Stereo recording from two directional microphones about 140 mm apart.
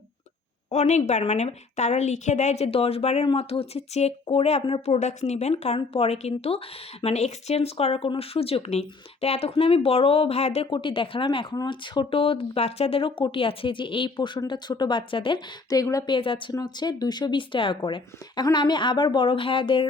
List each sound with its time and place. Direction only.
0.7 s speech: 55° left (ahead or behind)
10.7 s speech: 35° left (ahead or behind)